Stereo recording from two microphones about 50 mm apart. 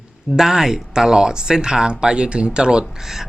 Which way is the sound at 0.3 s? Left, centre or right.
Centre.